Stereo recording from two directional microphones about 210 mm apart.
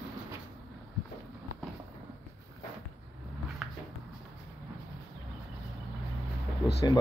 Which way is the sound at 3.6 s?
Centre (ahead or behind).